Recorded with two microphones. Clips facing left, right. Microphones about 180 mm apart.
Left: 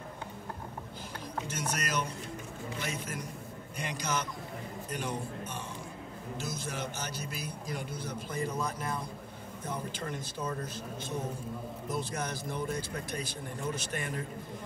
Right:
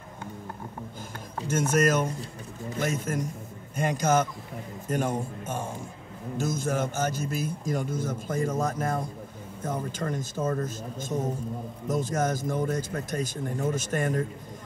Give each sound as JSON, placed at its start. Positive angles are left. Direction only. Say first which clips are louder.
{"t": 1.5, "sound": "a man's voice", "louder": "right 13 dB", "side_deg": -45}